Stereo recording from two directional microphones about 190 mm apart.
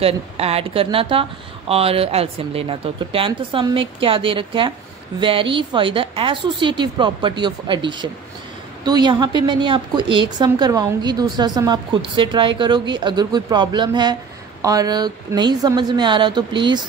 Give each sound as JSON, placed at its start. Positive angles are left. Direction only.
{"t": 0.0, "sound": "a woman's voice", "side_deg": -30}